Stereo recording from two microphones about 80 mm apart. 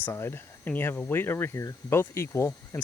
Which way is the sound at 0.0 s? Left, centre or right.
Left.